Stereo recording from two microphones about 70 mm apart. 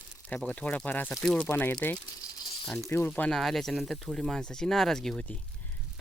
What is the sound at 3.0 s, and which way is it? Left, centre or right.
Speech, left.